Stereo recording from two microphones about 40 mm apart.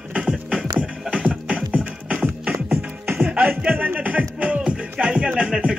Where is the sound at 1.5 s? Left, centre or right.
Right.